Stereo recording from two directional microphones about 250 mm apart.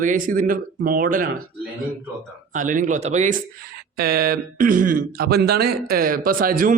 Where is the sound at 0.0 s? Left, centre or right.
Right.